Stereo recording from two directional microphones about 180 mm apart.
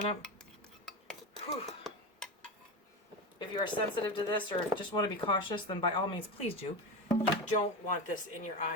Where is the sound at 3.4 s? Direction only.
25° left (ahead or behind).